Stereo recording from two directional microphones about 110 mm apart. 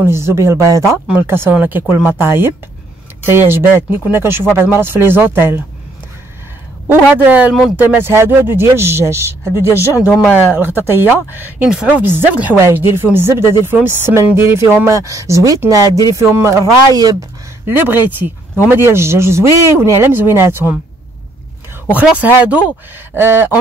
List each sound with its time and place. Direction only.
0.0 s speech: 25° right (ahead or behind)
6.9 s speech: 15° right (ahead or behind); by 17.1 s 30° right (ahead or behind)
17.8 s speech: 15° right (ahead or behind)
21.9 s speech: 10° right (ahead or behind)